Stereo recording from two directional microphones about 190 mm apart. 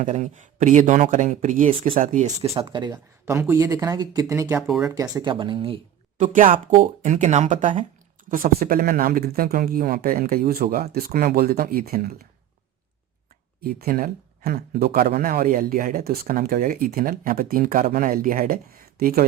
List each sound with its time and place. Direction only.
0.0 s speech: 40° right (ahead or behind)
2.5 s speech: 25° right (ahead or behind)
4.6 s speech: centre (ahead or behind)
4.9 s speech: 20° right (ahead or behind)
6.1 s speech: 40° right (ahead or behind)
13.6 s speech: 50° right (ahead or behind)